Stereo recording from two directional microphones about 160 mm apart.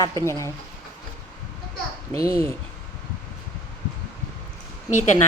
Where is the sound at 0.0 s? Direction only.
20° left (ahead or behind).